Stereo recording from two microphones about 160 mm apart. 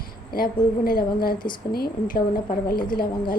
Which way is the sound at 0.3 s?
65° left (ahead or behind).